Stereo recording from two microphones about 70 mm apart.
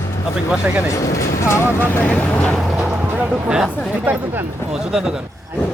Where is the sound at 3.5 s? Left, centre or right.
Centre.